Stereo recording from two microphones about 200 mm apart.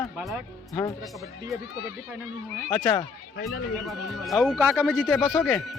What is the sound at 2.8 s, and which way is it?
Speech, 15° left (ahead or behind).